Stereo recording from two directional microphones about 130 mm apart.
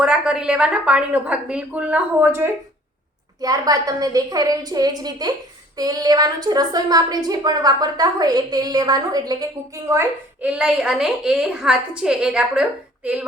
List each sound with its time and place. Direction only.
0.0 s a woman's voice: 5° right (ahead or behind)
3.4 s a woman's voice: 30° right (ahead or behind)
10.4 s a woman's voice: 10° right (ahead or behind)